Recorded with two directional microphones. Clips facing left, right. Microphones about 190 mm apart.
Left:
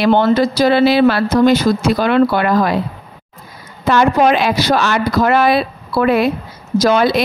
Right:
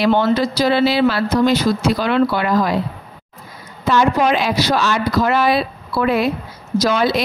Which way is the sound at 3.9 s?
60° left (ahead or behind).